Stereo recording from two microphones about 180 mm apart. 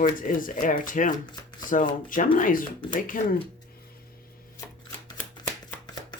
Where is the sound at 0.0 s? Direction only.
50° left (ahead or behind).